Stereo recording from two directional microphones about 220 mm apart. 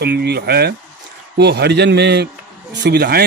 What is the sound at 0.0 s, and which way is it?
Speech, 45° right (ahead or behind).